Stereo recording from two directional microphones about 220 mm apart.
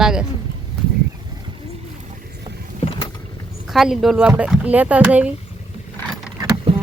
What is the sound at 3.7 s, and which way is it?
Speech, centre (ahead or behind).